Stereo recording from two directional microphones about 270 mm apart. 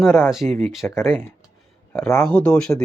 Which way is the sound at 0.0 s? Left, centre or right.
Centre.